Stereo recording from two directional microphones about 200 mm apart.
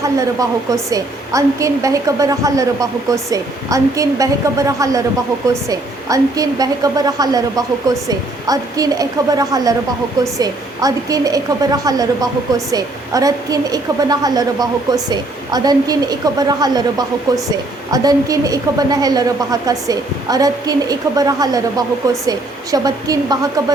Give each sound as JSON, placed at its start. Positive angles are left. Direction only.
{"t": 0.0, "sound": "a woman's voice", "side_deg": -15}